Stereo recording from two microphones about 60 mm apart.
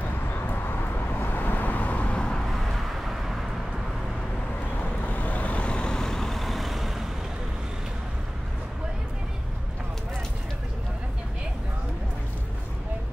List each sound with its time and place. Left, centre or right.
0.3 s vehicle: left; by 2.4 s centre
2.4 s vehicle: centre
4.7 s vehicle: left; by 7.1 s centre